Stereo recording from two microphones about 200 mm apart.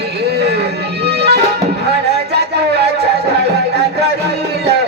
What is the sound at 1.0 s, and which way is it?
Music, 55° right (ahead or behind).